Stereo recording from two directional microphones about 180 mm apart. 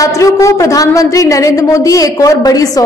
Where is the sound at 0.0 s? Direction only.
15° left (ahead or behind).